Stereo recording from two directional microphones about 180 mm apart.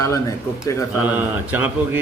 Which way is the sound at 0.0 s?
15° left (ahead or behind).